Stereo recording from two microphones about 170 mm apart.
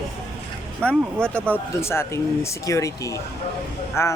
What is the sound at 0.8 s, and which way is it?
Speech, 5° left (ahead or behind).